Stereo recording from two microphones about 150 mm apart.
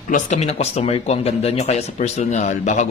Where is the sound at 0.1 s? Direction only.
50° left (ahead or behind).